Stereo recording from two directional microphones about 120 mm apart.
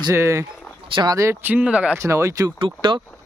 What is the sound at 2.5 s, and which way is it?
Speech, 45° right (ahead or behind).